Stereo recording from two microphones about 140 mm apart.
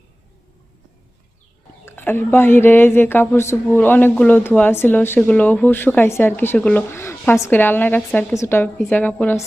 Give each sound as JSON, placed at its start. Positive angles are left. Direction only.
{"t": 1.8, "sound": "speech", "side_deg": 15}